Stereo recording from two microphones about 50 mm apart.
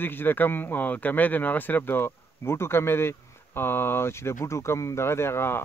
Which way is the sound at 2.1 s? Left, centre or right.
Left.